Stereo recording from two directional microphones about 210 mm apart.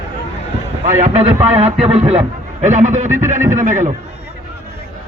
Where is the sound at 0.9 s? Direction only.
35° right (ahead or behind).